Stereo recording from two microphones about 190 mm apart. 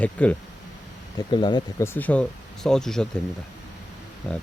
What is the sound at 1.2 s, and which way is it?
Speech, 25° left (ahead or behind).